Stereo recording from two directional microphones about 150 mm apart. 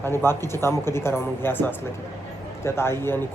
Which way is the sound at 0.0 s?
15° left (ahead or behind).